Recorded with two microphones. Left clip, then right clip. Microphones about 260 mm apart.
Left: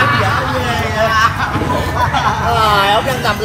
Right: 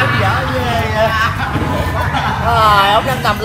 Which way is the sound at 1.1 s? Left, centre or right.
Centre.